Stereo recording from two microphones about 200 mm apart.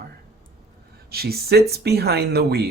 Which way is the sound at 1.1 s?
50° right (ahead or behind).